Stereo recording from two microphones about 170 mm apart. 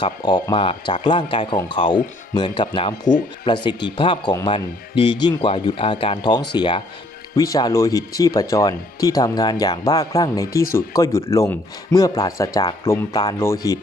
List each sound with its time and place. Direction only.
0.0 s speech: 25° left (ahead or behind)